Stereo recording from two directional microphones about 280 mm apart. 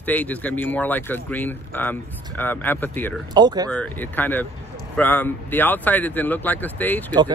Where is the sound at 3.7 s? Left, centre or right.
Centre.